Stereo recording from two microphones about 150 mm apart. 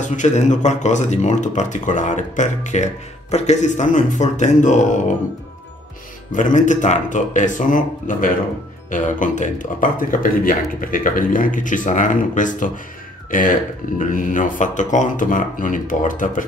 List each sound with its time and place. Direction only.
0.1 s speech: 50° left (ahead or behind)
6.3 s speech: 55° left (ahead or behind)